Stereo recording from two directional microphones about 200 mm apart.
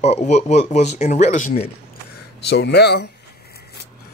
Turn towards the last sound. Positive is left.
turn(degrees=55)  # may be behind; listen again after turning